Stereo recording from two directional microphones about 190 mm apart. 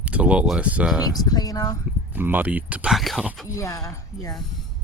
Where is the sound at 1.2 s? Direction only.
20° left (ahead or behind).